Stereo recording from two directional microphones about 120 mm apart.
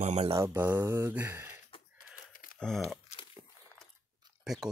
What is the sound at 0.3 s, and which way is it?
Speech, 20° right (ahead or behind).